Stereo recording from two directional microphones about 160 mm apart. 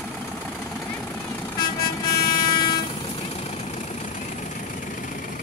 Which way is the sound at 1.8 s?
25° left (ahead or behind).